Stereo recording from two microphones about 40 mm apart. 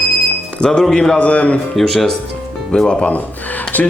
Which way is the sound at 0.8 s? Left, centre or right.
Left.